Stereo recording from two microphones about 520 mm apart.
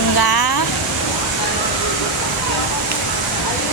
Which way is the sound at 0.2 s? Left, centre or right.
Left.